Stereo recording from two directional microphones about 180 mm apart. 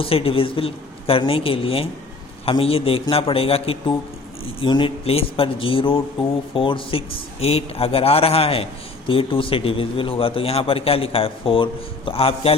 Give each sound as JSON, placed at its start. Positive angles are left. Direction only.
{"t": 0.0, "sound": "a man's voice", "side_deg": 30}